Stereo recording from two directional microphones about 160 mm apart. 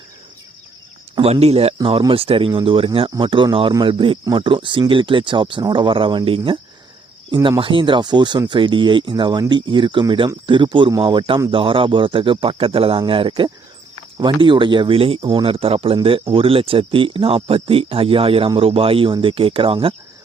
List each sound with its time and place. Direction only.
1.1 s speech: 40° right (ahead or behind)